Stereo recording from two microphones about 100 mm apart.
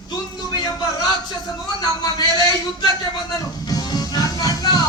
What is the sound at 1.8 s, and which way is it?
A man's voice, 40° left (ahead or behind).